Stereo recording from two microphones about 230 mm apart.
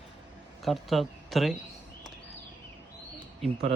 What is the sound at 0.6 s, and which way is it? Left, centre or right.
Speech, centre.